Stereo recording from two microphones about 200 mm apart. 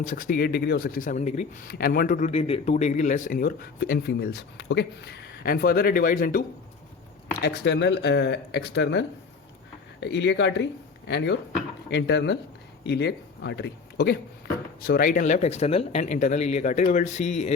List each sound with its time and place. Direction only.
0.0 s a man's voice: 40° left (ahead or behind)
1.6 s a man's voice: 50° left (ahead or behind)
7.4 s speech: 60° left (ahead or behind); by 17.5 s 35° left (ahead or behind)